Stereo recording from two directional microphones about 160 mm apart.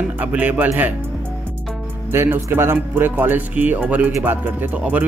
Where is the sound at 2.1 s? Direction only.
15° right (ahead or behind).